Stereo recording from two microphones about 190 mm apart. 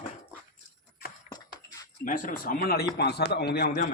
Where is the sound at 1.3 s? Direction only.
20° left (ahead or behind).